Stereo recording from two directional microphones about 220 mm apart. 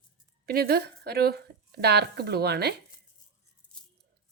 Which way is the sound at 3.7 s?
5° left (ahead or behind).